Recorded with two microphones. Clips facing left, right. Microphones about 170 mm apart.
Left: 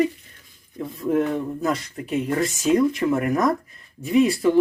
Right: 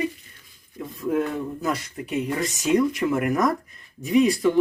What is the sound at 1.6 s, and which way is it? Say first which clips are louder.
Speech: left 2 dB; centre (ahead or behind).